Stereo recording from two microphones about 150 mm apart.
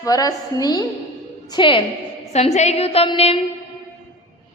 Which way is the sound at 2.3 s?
50° left (ahead or behind).